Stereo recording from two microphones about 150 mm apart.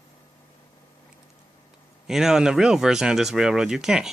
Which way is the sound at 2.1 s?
5° right (ahead or behind).